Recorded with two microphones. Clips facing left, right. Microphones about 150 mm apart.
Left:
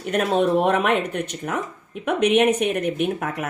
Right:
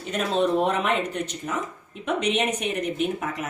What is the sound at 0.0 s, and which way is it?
Speech, 55° left (ahead or behind).